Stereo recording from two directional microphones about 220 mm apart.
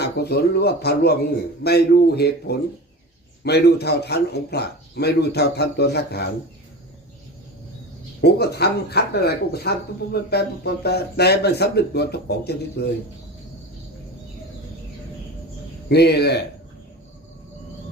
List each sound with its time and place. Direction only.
0.0 s speech: 50° left (ahead or behind)
8.2 s speech: 45° left (ahead or behind)
15.9 s speech: 50° left (ahead or behind)